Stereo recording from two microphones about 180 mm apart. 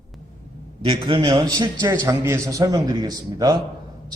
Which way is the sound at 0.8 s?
30° right (ahead or behind).